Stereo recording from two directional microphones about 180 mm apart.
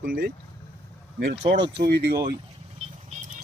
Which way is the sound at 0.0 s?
60° right (ahead or behind).